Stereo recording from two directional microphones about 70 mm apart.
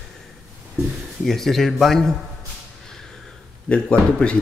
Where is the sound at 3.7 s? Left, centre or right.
Centre.